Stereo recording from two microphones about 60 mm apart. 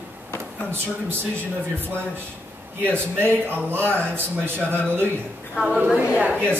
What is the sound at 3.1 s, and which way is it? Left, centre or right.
Speech, right.